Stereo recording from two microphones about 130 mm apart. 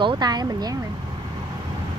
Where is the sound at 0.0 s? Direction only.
35° right (ahead or behind).